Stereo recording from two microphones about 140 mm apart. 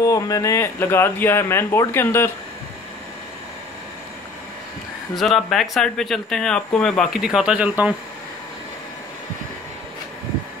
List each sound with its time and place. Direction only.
0.0 s speech: 25° left (ahead or behind)
5.1 s speech: centre (ahead or behind)